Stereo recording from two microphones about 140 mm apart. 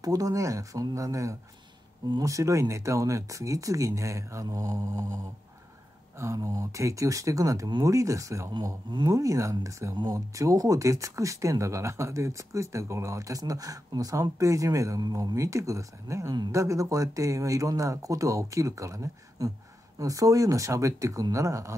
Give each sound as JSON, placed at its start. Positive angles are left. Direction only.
{"t": 0.0, "sound": "speech", "side_deg": -25}